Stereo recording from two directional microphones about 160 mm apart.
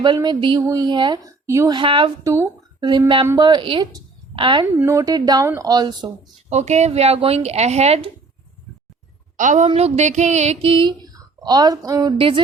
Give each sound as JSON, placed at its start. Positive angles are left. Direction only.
{"t": 0.0, "sound": "a woman's voice", "side_deg": -25}
{"t": 1.7, "sound": "speech", "side_deg": -30}
{"t": 2.2, "sound": "a woman's voice", "side_deg": -20}
{"t": 4.6, "sound": "a woman's voice", "side_deg": -15}
{"t": 6.5, "sound": "speech", "side_deg": -45}
{"t": 9.4, "sound": "a woman's voice", "side_deg": -50}
{"t": 9.6, "sound": "speech", "side_deg": -40}